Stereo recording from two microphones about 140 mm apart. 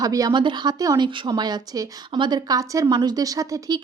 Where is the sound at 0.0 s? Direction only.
25° right (ahead or behind).